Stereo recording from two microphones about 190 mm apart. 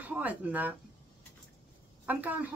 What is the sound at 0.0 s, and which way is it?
Speech, 10° right (ahead or behind).